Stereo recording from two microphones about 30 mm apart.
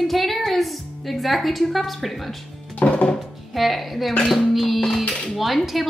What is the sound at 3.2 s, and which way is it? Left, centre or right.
Speech, centre.